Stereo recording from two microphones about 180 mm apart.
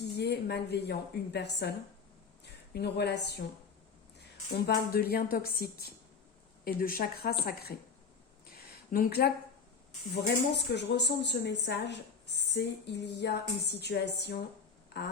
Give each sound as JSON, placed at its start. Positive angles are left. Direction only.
{"t": 0.0, "sound": "a woman's voice", "side_deg": 70}
{"t": 4.5, "sound": "a woman's voice", "side_deg": 60}
{"t": 8.5, "sound": "a sound", "side_deg": 55}
{"t": 10.5, "sound": "a woman's voice", "side_deg": 75}